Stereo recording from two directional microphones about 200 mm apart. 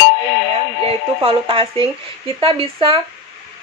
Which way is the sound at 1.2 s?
25° right (ahead or behind).